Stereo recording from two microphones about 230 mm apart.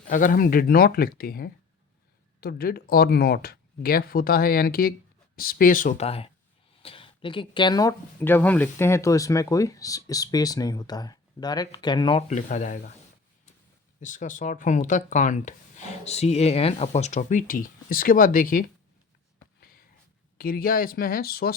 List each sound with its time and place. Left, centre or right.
0.1 s speech: left
14.0 s speech: left
20.4 s speech: left